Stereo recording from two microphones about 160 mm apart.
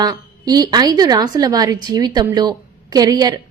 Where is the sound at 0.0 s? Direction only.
25° right (ahead or behind).